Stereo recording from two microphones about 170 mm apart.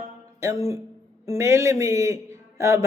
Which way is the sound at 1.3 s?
15° right (ahead or behind).